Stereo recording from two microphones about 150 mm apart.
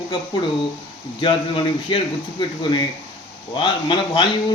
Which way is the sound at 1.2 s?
35° left (ahead or behind).